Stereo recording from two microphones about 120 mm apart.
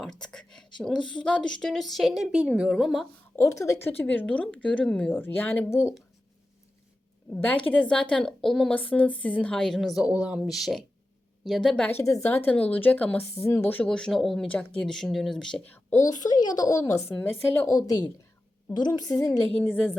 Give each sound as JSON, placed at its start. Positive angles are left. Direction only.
{"t": 0.0, "sound": "a woman's voice", "side_deg": 5}
{"t": 3.3, "sound": "a woman's voice", "side_deg": 25}
{"t": 7.3, "sound": "a woman's voice", "side_deg": 10}
{"t": 12.0, "sound": "a woman's voice", "side_deg": 20}
{"t": 15.7, "sound": "a woman's voice", "side_deg": 20}
{"t": 16.0, "sound": "speech", "side_deg": 35}
{"t": 17.2, "sound": "a woman's voice", "side_deg": 15}
{"t": 17.7, "sound": "speech", "side_deg": 30}
{"t": 19.5, "sound": "a woman's voice", "side_deg": 15}